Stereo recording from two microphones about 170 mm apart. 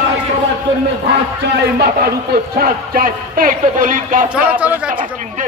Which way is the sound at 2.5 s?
55° right (ahead or behind).